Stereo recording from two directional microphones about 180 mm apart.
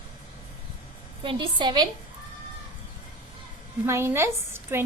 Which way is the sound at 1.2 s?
25° right (ahead or behind).